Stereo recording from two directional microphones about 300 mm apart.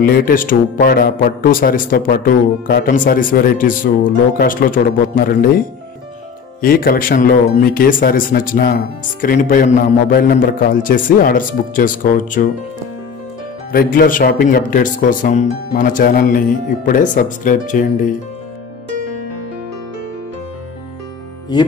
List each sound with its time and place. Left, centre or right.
0.0 s speech: left
6.6 s speech: left
13.7 s speech: left
21.5 s music: centre